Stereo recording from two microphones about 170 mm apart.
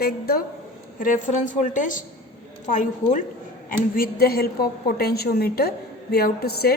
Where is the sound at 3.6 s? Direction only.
60° left (ahead or behind).